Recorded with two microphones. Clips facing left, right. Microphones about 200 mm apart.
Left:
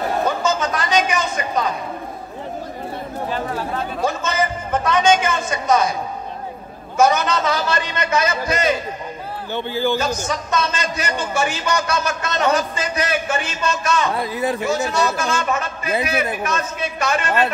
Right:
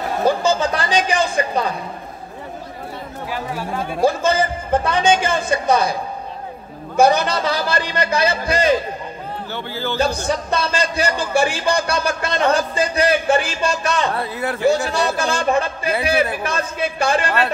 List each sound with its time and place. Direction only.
0.2 s a sound: 30° right (ahead or behind)
3.3 s chatter: 10° right (ahead or behind)
4.0 s a man's voice: 30° right (ahead or behind)
7.0 s a man's voice: 30° right (ahead or behind)
9.5 s speech: 15° left (ahead or behind)
10.2 s a man's voice: 30° right (ahead or behind)
14.1 s speech: 15° left (ahead or behind)
14.9 s a man's voice: 30° right (ahead or behind)